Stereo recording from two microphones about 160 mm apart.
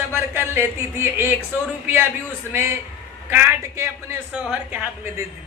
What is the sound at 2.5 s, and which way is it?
Speech, 15° right (ahead or behind).